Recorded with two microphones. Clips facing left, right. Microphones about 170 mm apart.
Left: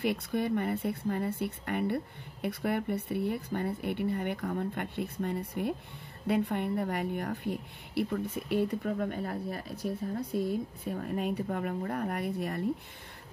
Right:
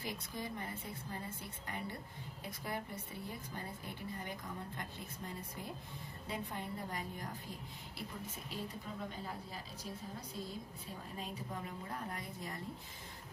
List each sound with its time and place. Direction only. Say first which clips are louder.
0.0 s a woman's voice: left 13 dB; 65° left (ahead or behind)